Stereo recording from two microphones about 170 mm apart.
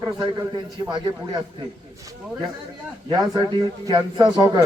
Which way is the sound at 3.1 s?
25° right (ahead or behind).